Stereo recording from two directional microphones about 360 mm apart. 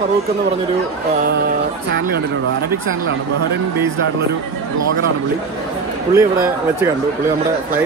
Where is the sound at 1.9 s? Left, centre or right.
Right.